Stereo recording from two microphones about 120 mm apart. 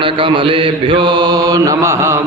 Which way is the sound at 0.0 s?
45° right (ahead or behind).